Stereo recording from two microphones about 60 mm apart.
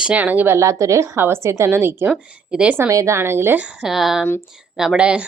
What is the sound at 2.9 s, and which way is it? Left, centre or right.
Speech, right.